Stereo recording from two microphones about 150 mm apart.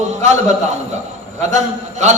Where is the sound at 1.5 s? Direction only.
50° right (ahead or behind).